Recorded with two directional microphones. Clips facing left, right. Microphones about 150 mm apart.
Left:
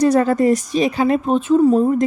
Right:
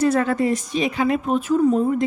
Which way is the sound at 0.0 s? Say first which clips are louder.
Left 5 dB; 35° left (ahead or behind).